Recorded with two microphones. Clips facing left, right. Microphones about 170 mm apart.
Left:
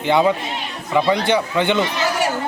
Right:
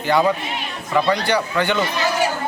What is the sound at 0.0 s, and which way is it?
Speech, 20° left (ahead or behind).